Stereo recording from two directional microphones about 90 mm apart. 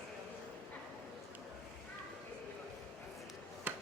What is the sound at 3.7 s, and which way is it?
Basketball bounce, 20° right (ahead or behind).